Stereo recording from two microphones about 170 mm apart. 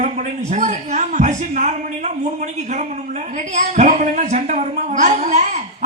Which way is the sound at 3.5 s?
45° right (ahead or behind).